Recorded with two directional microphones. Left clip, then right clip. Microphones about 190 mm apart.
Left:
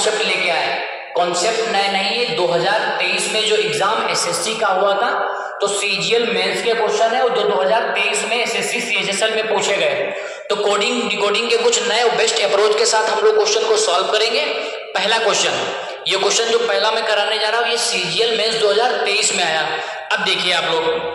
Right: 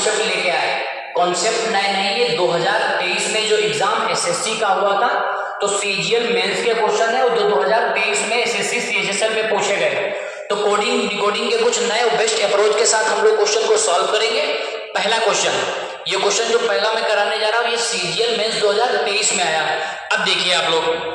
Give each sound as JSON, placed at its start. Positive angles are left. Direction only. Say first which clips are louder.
{"t": 7.3, "sound": "a man's voice", "louder": "even", "side_deg": 15}
{"t": 10.7, "sound": "a man's voice", "louder": "even", "side_deg": 30}
{"t": 18.6, "sound": "a man's voice", "louder": "even", "side_deg": 20}